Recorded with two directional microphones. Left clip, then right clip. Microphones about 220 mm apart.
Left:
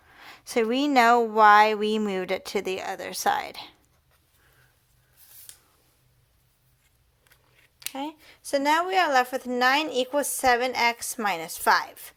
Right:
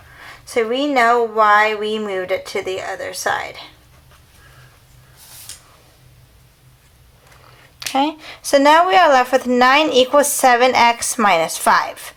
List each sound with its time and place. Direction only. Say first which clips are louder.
0.2 s speech: right 6 dB; 40° left (ahead or behind)
7.8 s speech: right 16 dB; 10° left (ahead or behind)